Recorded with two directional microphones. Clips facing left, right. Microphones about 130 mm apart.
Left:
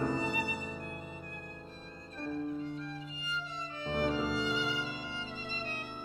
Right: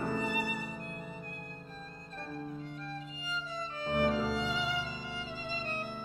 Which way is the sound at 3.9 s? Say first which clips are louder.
Right 2 dB; 45° right (ahead or behind).